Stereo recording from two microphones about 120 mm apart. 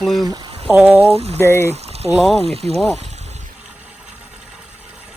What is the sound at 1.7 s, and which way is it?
Boiling, 60° right (ahead or behind).